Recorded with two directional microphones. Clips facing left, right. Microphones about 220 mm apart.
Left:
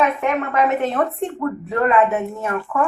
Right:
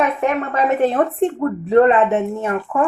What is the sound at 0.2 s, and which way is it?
A woman's voice, 35° right (ahead or behind).